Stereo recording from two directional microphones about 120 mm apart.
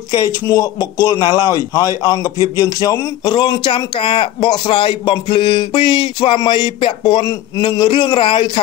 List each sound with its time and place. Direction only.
0.1 s speech: 30° left (ahead or behind)
3.3 s a man's voice: 40° left (ahead or behind)
4.6 s a sound: 50° left (ahead or behind)